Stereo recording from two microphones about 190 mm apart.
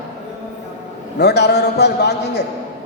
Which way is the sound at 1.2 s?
60° left (ahead or behind).